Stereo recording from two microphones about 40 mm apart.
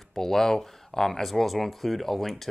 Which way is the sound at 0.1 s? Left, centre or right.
Centre.